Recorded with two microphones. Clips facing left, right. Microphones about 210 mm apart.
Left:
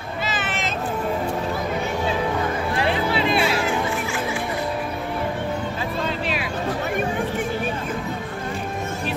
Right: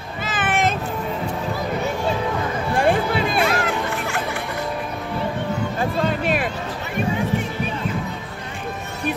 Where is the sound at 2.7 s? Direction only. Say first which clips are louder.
Right 5 dB; 50° right (ahead or behind).